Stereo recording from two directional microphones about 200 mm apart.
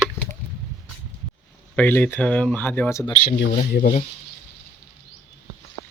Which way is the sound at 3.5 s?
45° left (ahead or behind).